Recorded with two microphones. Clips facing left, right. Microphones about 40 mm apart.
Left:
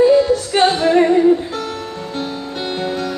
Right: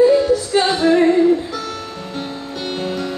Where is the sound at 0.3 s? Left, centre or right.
Left.